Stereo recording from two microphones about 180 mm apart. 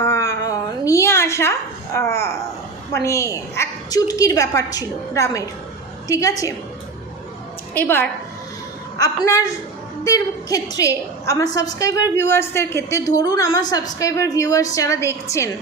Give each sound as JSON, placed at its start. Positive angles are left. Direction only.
{"t": 0.0, "sound": "a sound", "side_deg": 15}
{"t": 2.9, "sound": "a woman's voice", "side_deg": 15}
{"t": 7.7, "sound": "a woman's voice", "side_deg": 10}
{"t": 9.2, "sound": "a woman's voice", "side_deg": 15}